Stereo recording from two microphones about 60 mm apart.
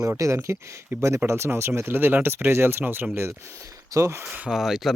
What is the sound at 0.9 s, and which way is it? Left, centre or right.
Speech, right.